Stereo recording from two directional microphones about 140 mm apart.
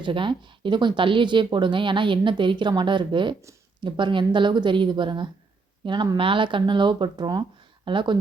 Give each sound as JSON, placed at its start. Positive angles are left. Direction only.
{"t": 0.0, "sound": "speech", "side_deg": -35}